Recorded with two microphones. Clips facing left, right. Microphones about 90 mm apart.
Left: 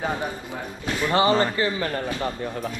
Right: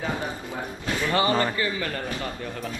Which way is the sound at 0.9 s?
20° left (ahead or behind).